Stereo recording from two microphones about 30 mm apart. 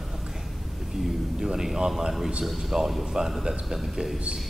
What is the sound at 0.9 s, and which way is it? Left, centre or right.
A man's voice, centre.